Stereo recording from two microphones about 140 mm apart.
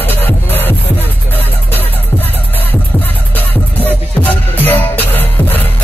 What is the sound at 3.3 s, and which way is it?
Music, 10° left (ahead or behind).